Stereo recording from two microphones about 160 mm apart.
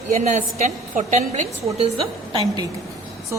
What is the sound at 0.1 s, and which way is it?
A woman's voice, 50° right (ahead or behind).